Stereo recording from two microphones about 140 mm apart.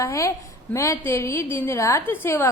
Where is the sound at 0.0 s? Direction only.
20° left (ahead or behind).